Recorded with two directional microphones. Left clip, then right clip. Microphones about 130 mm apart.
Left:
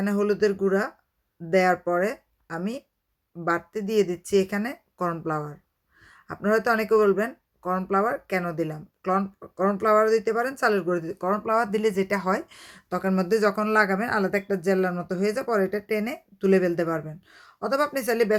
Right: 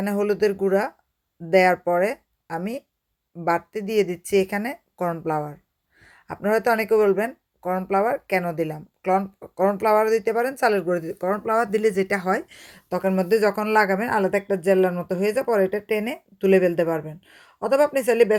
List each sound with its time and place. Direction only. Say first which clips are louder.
0.0 s speech: right 2 dB; 25° right (ahead or behind)